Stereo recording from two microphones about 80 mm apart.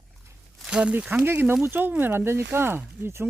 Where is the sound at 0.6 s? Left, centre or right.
Centre; by 3.3 s right.